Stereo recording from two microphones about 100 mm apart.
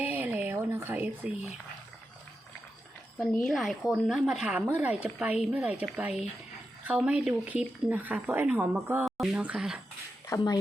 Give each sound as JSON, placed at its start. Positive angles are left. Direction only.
{"t": 0.0, "sound": "a sound", "side_deg": -20}
{"t": 3.3, "sound": "speech", "side_deg": 0}
{"t": 9.0, "sound": "speech", "side_deg": -5}
{"t": 10.2, "sound": "speech", "side_deg": 35}